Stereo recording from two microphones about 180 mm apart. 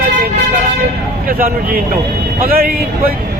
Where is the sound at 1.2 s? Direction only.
55° right (ahead or behind).